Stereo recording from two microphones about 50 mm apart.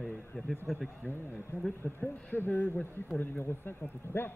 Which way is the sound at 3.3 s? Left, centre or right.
Left.